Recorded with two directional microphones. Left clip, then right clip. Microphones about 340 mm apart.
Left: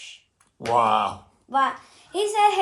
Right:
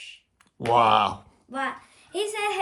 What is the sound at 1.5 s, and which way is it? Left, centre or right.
A woman's voice, centre.